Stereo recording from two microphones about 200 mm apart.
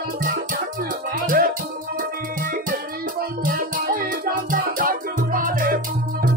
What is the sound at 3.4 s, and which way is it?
Music, 45° right (ahead or behind).